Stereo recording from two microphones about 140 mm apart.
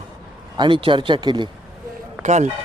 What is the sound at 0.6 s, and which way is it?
Speech, 35° right (ahead or behind).